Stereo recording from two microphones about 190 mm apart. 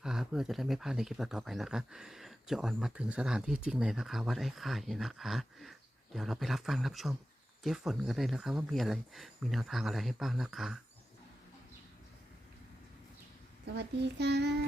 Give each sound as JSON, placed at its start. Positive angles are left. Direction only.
{"t": 0.0, "sound": "speech", "side_deg": -5}
{"t": 13.7, "sound": "child singing", "side_deg": -65}